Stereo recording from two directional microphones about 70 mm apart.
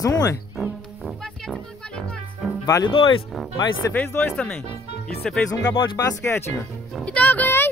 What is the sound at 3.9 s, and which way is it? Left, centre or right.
Speech, left.